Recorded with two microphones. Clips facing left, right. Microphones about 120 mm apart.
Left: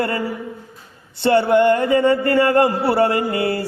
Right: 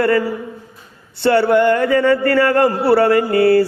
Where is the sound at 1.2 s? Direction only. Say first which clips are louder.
Right 1 dB; 20° left (ahead or behind).